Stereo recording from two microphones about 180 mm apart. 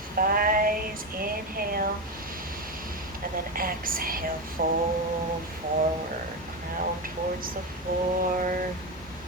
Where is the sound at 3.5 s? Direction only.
50° right (ahead or behind).